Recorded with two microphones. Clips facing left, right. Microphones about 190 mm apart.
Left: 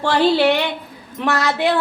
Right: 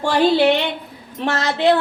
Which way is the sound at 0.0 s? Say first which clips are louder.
Even; 15° right (ahead or behind).